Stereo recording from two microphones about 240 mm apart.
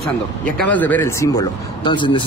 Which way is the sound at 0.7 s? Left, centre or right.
Centre.